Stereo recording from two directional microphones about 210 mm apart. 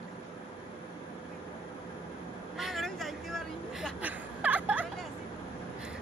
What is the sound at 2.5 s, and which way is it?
Vehicle, centre (ahead or behind).